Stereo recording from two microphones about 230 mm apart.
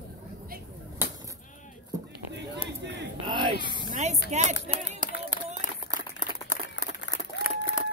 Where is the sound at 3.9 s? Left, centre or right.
Right.